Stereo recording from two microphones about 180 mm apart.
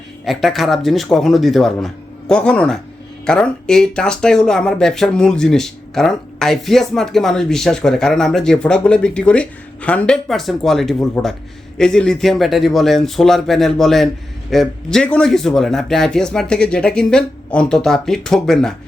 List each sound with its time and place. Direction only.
0.3 s speech: centre (ahead or behind)